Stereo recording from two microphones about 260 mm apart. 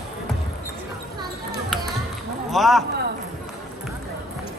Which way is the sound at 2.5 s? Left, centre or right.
Centre.